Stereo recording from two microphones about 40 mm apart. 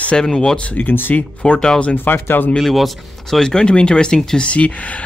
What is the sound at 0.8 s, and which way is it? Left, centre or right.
Speech, left.